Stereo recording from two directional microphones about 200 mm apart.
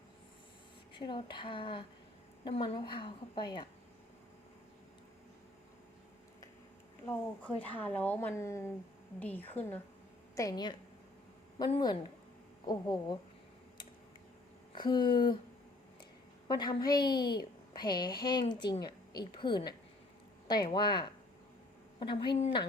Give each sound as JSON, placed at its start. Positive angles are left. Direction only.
{"t": 0.9, "sound": "a woman's voice", "side_deg": 25}
{"t": 7.0, "sound": "a woman's voice", "side_deg": 5}
{"t": 14.7, "sound": "speech", "side_deg": 20}
{"t": 16.5, "sound": "a woman's voice", "side_deg": 20}